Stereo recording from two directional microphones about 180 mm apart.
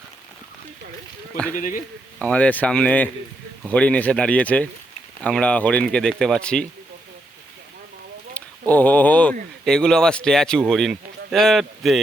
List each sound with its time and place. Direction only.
1.5 s speech: 45° left (ahead or behind)
2.1 s speech: 10° left (ahead or behind)
8.4 s speech: 10° left (ahead or behind)